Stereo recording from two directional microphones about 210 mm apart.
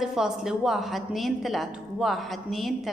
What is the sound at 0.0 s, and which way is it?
A woman's voice, centre (ahead or behind).